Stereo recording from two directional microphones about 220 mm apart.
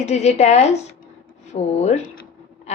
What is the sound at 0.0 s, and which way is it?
A woman's voice, 30° left (ahead or behind).